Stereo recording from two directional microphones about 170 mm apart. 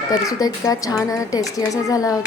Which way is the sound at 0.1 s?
20° left (ahead or behind).